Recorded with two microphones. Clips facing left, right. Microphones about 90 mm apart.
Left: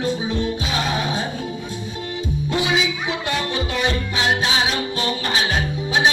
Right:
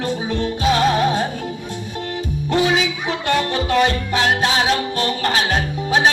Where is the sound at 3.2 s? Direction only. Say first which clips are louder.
Right 8 dB; 50° right (ahead or behind).